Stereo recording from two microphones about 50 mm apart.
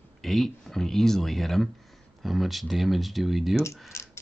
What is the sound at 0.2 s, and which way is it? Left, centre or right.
Speech, centre.